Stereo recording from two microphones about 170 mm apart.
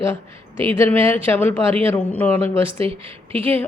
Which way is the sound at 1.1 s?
15° left (ahead or behind).